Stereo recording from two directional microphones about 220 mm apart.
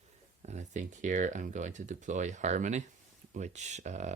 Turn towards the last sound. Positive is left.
turn(degrees=-30)  # may be behind; listen again after turning